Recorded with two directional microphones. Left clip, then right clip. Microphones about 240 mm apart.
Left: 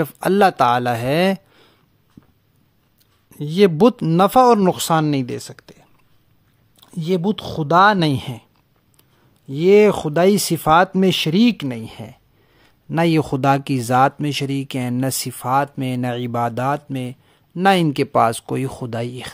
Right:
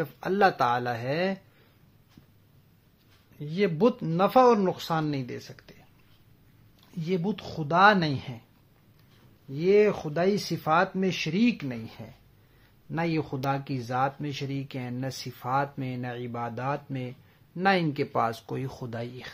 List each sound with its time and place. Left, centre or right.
0.0 s speech: left
3.3 s speech: left
9.5 s speech: left